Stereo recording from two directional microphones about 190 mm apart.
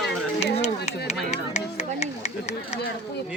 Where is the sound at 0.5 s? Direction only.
35° left (ahead or behind).